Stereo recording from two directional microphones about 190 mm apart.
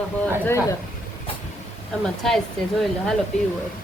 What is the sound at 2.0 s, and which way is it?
Speech, centre (ahead or behind).